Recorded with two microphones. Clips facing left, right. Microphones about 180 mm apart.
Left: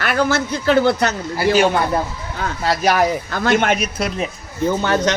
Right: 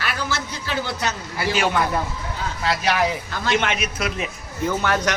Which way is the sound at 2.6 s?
45° left (ahead or behind).